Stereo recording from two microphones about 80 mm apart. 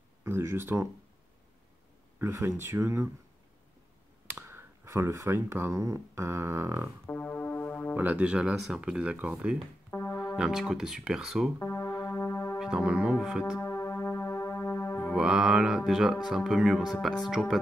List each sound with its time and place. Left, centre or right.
0.2 s speech: right
2.1 s speech: right
4.4 s speech: right
7.1 s music: centre
7.9 s speech: centre
9.8 s music: left
10.3 s speech: centre
11.6 s music: left
12.5 s speech: centre
13.6 s music: left
15.1 s speech: centre